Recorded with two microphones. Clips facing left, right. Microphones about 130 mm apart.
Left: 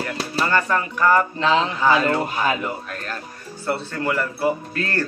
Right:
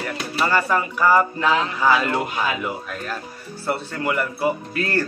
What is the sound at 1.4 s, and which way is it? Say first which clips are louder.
Speech: left 1 dB; 25° left (ahead or behind).